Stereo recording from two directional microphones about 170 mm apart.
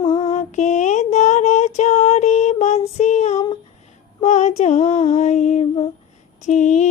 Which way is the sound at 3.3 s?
25° left (ahead or behind).